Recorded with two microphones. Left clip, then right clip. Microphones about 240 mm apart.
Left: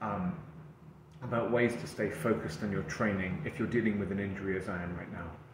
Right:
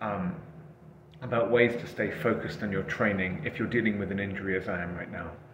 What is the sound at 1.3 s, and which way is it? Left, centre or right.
A man's voice, centre.